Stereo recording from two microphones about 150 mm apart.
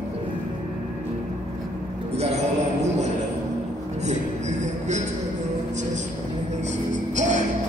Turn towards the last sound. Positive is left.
turn(degrees=-55)  # may be behind; listen again after turning